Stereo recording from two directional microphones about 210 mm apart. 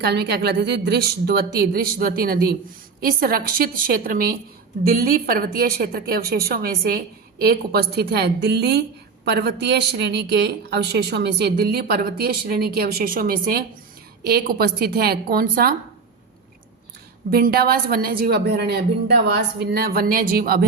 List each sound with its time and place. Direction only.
0.0 s speech: 50° right (ahead or behind)
17.3 s speech: 45° right (ahead or behind)